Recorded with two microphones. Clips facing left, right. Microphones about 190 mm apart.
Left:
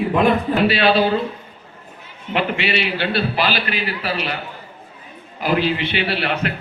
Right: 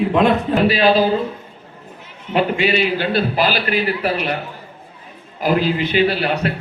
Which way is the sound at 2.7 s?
45° right (ahead or behind).